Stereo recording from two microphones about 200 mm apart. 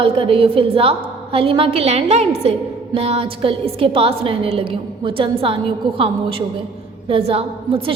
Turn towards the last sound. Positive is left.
turn(degrees=-30)  # may be behind; listen again after turning